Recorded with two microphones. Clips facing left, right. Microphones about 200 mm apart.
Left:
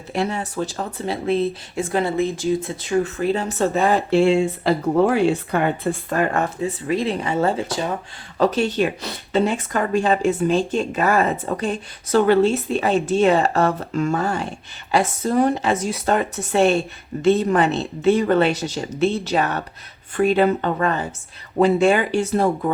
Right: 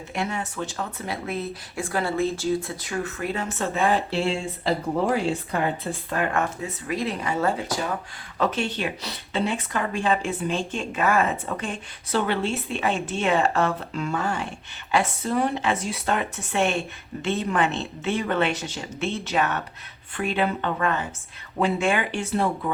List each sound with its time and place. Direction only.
0.1 s speech: 35° left (ahead or behind)
8.4 s speech: 40° left (ahead or behind)